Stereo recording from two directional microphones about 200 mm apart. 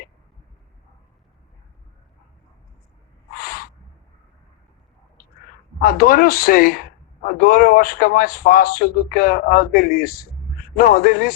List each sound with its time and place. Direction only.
3.3 s owl: 45° left (ahead or behind)
5.8 s a man's voice: 45° left (ahead or behind)